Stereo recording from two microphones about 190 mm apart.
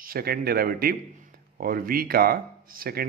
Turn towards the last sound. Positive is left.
turn(degrees=-50)  # may be behind; listen again after turning